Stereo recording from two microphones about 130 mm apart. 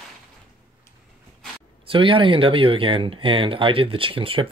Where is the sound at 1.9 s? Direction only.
40° right (ahead or behind).